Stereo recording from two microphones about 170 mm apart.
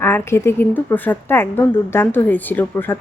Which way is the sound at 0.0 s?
15° left (ahead or behind).